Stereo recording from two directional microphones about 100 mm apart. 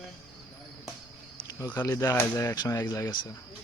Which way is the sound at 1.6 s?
20° left (ahead or behind).